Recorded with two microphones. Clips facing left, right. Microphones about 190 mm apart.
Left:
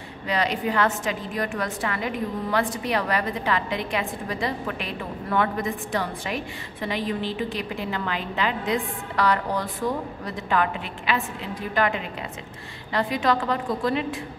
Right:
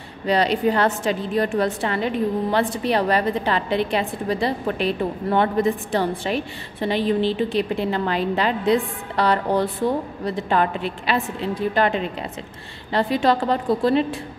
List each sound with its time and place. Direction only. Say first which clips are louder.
0.3 s a woman's voice: right 6 dB; 30° right (ahead or behind)